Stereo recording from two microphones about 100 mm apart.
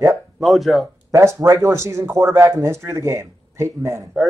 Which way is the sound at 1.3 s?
30° right (ahead or behind).